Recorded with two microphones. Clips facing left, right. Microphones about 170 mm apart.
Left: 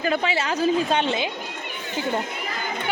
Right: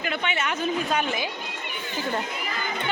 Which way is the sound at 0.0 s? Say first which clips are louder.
Left 5 dB; 35° left (ahead or behind).